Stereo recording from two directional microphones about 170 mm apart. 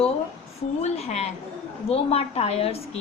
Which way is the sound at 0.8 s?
40° left (ahead or behind).